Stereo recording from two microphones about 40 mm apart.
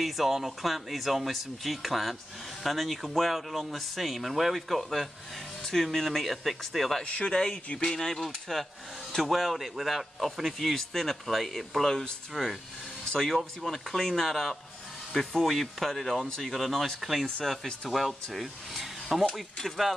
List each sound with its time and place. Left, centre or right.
0.0 s speech: centre
7.1 s speech: left
7.3 s speech: centre
13.1 s speech: centre